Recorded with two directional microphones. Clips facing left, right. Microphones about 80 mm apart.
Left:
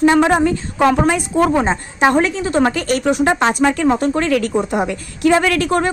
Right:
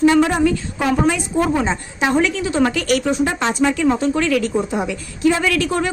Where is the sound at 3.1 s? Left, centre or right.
Left.